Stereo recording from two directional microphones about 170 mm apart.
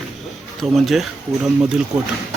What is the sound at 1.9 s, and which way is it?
Speech, 40° right (ahead or behind).